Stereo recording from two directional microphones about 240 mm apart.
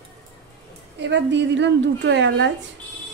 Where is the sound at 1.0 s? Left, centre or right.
Right.